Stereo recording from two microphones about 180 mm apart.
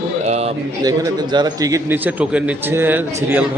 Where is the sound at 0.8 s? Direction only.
20° right (ahead or behind).